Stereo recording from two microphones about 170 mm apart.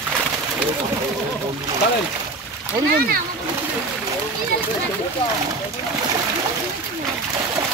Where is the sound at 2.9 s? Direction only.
60° right (ahead or behind).